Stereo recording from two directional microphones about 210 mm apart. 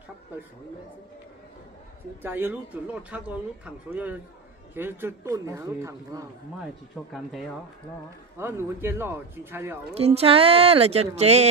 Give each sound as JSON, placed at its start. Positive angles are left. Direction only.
{"t": 2.2, "sound": "speech", "side_deg": -10}
{"t": 6.6, "sound": "speech", "side_deg": 0}
{"t": 8.4, "sound": "speech", "side_deg": -10}
{"t": 9.9, "sound": "speech", "side_deg": -30}